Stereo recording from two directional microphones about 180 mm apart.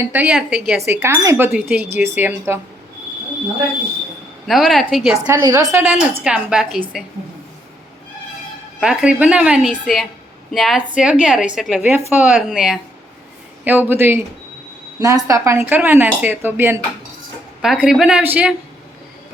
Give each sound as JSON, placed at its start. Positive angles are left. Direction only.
{"t": 0.0, "sound": "a woman's voice", "side_deg": -10}
{"t": 0.9, "sound": "speech", "side_deg": -15}
{"t": 4.4, "sound": "a woman's voice", "side_deg": 0}
{"t": 5.3, "sound": "a woman's voice", "side_deg": -20}
{"t": 8.8, "sound": "a woman's voice", "side_deg": -5}